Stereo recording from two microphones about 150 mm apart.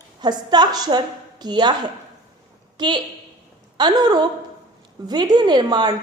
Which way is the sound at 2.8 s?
30° right (ahead or behind).